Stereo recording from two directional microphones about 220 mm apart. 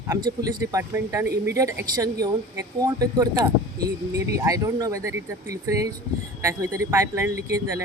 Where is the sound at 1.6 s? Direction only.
15° right (ahead or behind).